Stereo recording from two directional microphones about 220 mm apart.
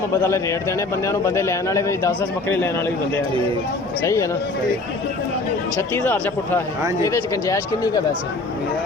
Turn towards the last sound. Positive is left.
turn(degrees=15)  # may be behind; listen again after turning